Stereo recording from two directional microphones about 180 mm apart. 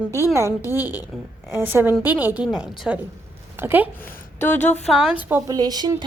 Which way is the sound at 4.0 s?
10° left (ahead or behind).